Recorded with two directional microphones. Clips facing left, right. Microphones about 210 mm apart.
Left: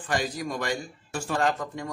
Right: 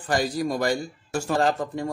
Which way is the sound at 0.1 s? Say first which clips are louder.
Right 5 dB; 35° right (ahead or behind).